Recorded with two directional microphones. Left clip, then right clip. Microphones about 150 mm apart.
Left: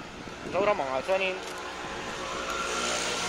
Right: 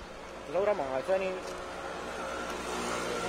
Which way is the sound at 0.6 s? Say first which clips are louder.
Left 4 dB; centre (ahead or behind).